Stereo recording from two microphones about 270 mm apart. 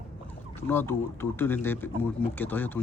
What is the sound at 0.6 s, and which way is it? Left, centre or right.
Speech, centre.